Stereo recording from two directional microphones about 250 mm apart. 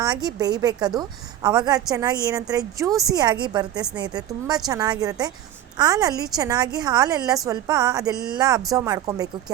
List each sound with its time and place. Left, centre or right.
0.0 s a woman's voice: centre